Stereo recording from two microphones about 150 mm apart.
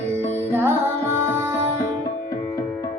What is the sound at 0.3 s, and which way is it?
Music, 15° right (ahead or behind).